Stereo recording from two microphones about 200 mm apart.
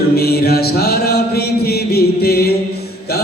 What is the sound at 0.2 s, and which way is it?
Chant, 50° left (ahead or behind).